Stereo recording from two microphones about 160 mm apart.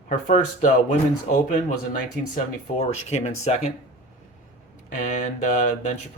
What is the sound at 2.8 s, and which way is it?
Speech, 40° left (ahead or behind).